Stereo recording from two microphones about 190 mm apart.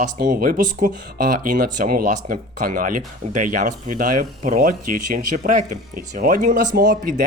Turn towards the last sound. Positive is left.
turn(degrees=-45)  # may be behind; listen again after turning